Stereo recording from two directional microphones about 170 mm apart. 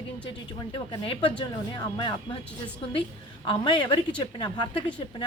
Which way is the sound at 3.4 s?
25° left (ahead or behind).